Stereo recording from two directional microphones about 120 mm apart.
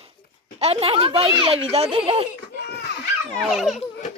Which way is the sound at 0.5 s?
55° right (ahead or behind).